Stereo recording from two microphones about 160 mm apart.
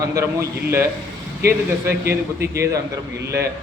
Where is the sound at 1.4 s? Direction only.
80° right.